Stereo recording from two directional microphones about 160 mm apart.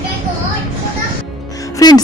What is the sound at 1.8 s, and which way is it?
Music, 25° left (ahead or behind).